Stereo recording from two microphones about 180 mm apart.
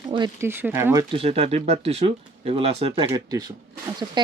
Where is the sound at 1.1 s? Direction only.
35° right (ahead or behind).